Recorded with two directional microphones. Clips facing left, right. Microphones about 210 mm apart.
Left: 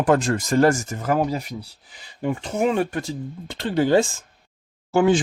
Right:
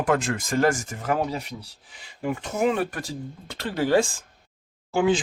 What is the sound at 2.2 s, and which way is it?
Speech, 25° left (ahead or behind).